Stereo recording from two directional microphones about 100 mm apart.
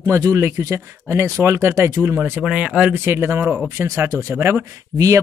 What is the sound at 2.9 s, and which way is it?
Speech, 25° right (ahead or behind).